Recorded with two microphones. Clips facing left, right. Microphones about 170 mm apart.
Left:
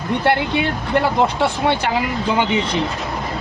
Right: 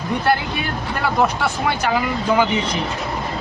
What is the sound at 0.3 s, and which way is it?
Speech, 25° left (ahead or behind).